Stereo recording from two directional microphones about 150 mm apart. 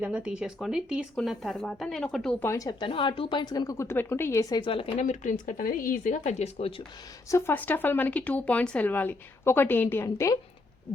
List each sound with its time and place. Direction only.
0.0 s speech: 5° right (ahead or behind)
2.4 s speech: 20° left (ahead or behind)
2.6 s a woman's voice: 35° left (ahead or behind)
5.0 s speech: 60° left (ahead or behind); by 6.8 s 40° left (ahead or behind)
7.3 s speech: 15° left (ahead or behind)